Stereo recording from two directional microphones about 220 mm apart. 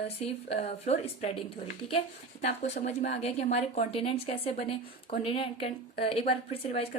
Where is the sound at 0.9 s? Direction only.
30° left (ahead or behind).